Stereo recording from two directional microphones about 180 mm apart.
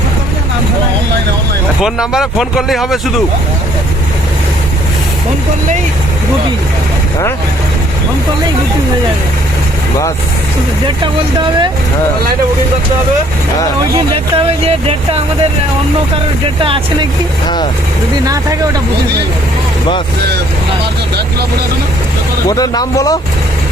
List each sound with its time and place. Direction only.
1.8 s a man's voice: 5° right (ahead or behind)
14.3 s speech: 30° right (ahead or behind)
16.6 s speech: 30° right (ahead or behind)
22.4 s speech: 20° left (ahead or behind)